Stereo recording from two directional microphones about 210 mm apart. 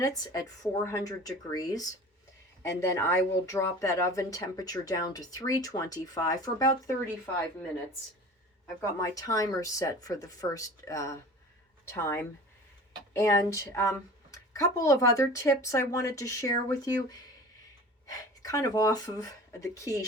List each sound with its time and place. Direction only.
0.0 s speech: 15° left (ahead or behind)
9.0 s speech: 15° left (ahead or behind)